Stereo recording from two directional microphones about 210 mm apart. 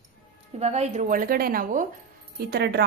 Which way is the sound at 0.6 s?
30° right (ahead or behind).